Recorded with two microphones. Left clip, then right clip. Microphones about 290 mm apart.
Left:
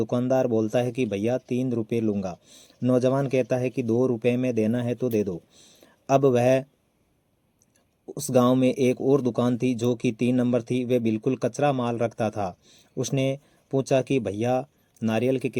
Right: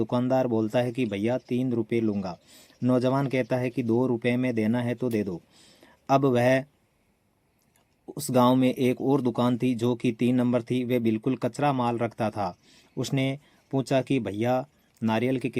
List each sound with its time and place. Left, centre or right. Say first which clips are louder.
0.1 s speech: left 2 dB; centre
8.2 s speech: left 1 dB; centre